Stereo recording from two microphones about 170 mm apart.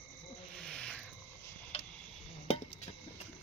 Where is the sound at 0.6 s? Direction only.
5° left (ahead or behind).